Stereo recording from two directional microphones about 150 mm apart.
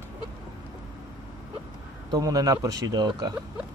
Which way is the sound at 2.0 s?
25° right (ahead or behind).